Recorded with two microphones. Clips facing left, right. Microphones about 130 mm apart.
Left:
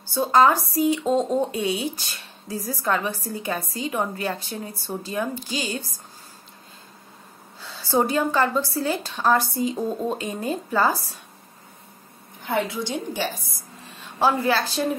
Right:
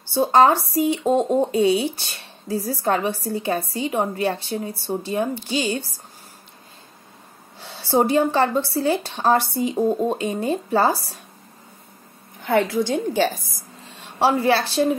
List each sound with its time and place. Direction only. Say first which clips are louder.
0.1 s a woman's voice: right 2 dB; 30° right (ahead or behind)
1.5 s a woman's voice: right 7 dB; 30° right (ahead or behind)
7.7 s a woman's voice: right 4 dB; 30° right (ahead or behind)
12.7 s a woman's voice: right 7 dB; 50° right (ahead or behind)
14.1 s a woman's voice: right 3 dB; 30° right (ahead or behind)